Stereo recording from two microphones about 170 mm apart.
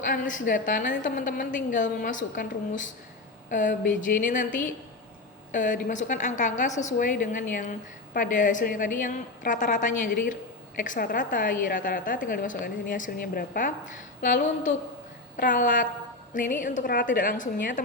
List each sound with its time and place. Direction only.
0.1 s a woman's voice: 50° left (ahead or behind)